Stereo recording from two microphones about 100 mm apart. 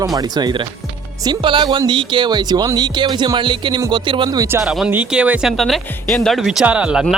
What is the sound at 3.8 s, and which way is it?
Speech, 40° right (ahead or behind).